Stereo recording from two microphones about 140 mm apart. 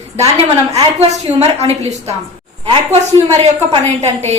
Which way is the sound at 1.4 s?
50° right (ahead or behind).